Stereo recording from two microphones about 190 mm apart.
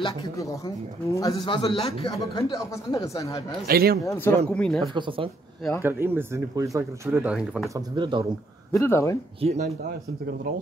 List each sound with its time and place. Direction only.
0.0 s speech: 20° left (ahead or behind)
3.6 s speech: 55° right (ahead or behind)
4.0 s speech: 15° left (ahead or behind)
4.9 s speech: 25° right (ahead or behind)
5.8 s speech: 10° right (ahead or behind)
7.7 s speech: 25° right (ahead or behind)
8.7 s speech: 15° left (ahead or behind)
9.4 s speech: 35° right (ahead or behind)